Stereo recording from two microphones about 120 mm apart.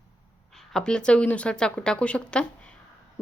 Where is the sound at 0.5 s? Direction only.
5° left (ahead or behind).